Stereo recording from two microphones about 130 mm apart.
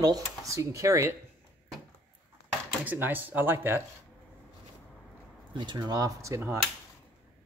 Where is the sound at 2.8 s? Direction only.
15° right (ahead or behind).